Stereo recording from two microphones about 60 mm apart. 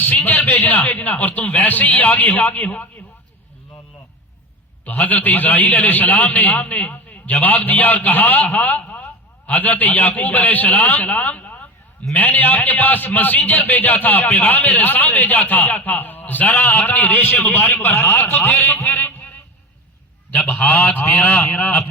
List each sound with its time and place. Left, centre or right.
0.0 s a man's voice: left
4.9 s a man's voice: left
20.7 s a man's voice: left